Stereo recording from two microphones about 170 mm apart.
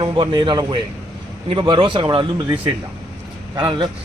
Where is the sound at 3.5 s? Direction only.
25° right (ahead or behind).